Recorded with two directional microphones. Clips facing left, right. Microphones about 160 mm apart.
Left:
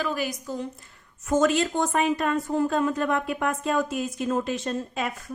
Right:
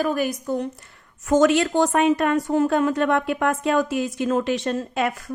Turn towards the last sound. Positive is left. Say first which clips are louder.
# right 5 dB
turn(degrees=-80)